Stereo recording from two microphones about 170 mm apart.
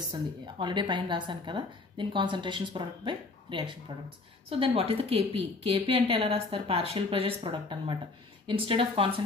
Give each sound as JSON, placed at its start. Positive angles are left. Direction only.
{"t": 0.1, "sound": "a woman's voice", "side_deg": -25}